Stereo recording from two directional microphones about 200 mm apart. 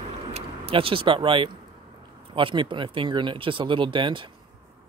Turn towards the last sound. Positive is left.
turn(degrees=-25)  # may be behind; listen again after turning